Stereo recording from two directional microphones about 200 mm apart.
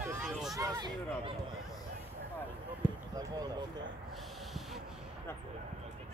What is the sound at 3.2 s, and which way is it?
Speech, 20° right (ahead or behind).